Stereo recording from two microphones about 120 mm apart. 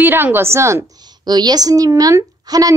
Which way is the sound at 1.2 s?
35° right (ahead or behind).